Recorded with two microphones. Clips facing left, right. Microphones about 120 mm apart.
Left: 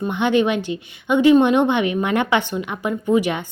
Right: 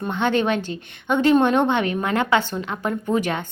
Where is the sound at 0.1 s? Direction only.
15° left (ahead or behind).